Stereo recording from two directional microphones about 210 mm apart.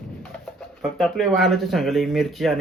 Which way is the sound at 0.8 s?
Centre (ahead or behind).